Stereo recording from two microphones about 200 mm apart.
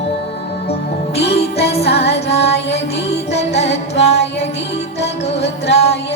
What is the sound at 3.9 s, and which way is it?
Music, 55° left (ahead or behind).